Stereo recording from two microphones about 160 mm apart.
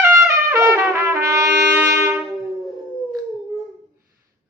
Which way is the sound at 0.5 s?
15° right (ahead or behind).